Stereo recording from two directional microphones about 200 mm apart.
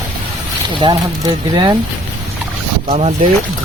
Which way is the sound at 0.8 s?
20° right (ahead or behind).